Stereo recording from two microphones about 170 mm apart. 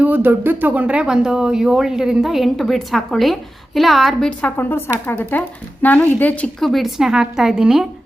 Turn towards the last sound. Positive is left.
turn(degrees=-5)  # may be behind; listen again after turning